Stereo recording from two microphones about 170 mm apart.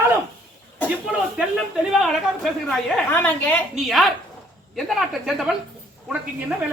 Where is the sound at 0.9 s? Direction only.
5° right (ahead or behind).